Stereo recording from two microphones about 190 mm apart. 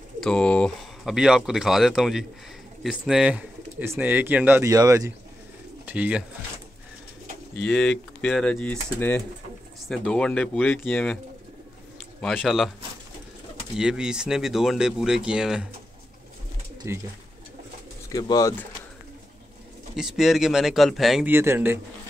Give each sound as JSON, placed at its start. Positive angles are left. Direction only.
{"t": 0.2, "sound": "speech", "side_deg": 5}
{"t": 7.5, "sound": "speech", "side_deg": 5}
{"t": 12.2, "sound": "speech", "side_deg": 5}
{"t": 13.7, "sound": "speech", "side_deg": -5}
{"t": 16.8, "sound": "speech", "side_deg": -15}
{"t": 18.1, "sound": "speech", "side_deg": 20}
{"t": 20.0, "sound": "speech", "side_deg": 0}
{"t": 21.3, "sound": "speech", "side_deg": -10}